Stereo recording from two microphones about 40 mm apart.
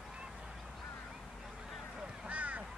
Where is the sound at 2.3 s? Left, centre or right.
Right.